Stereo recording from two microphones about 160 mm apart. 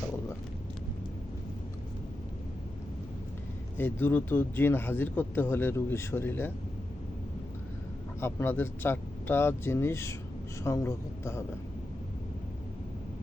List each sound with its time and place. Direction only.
3.8 s speech: 10° left (ahead or behind)
8.2 s speech: 15° left (ahead or behind)